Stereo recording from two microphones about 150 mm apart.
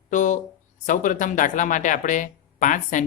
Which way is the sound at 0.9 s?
60° left (ahead or behind).